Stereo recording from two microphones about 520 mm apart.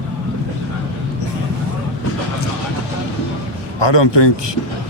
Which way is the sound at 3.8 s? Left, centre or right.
Left.